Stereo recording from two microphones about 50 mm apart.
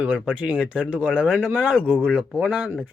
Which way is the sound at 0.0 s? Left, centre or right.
Right.